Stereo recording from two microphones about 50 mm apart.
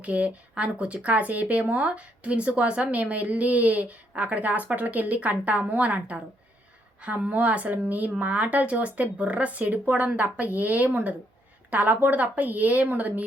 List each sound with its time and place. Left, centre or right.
0.0 s a woman's voice: right
11.7 s a woman's voice: right